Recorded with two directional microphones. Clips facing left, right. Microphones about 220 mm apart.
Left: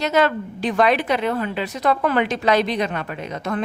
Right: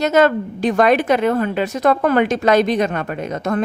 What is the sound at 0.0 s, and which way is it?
A woman's voice, 45° right (ahead or behind).